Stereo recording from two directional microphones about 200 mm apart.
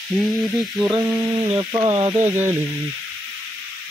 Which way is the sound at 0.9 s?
15° right (ahead or behind).